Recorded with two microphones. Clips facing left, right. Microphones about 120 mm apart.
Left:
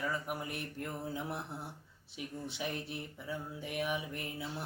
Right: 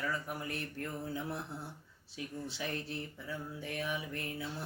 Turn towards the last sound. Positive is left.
turn(degrees=20)  # may be behind; listen again after turning